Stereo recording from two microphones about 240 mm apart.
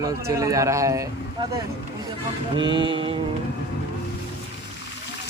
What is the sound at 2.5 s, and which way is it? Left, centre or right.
Mantra, centre.